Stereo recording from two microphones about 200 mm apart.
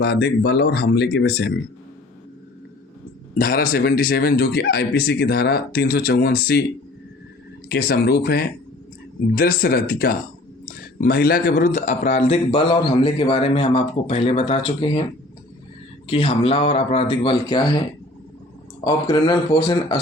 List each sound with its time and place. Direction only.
0.0 s speech: 55° left (ahead or behind)
3.3 s a man's voice: 50° left (ahead or behind)
7.7 s a man's voice: 50° left (ahead or behind); by 15.0 s 25° left (ahead or behind)
16.0 s a man's voice: 30° left (ahead or behind)
18.9 s a man's voice: 20° left (ahead or behind)